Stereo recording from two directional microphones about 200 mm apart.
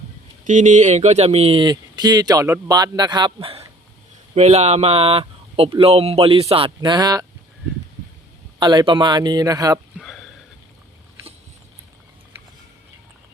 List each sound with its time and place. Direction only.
0.4 s speech: 40° right (ahead or behind); by 7.3 s 20° right (ahead or behind)
8.5 s speech: 20° right (ahead or behind)
10.0 s sniff: centre (ahead or behind)